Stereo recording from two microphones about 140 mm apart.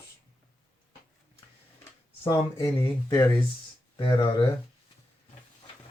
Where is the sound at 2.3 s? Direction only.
25° left (ahead or behind).